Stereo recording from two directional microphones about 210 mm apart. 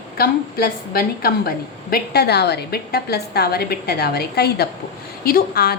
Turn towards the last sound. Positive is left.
turn(degrees=50)  # may be behind; listen again after turning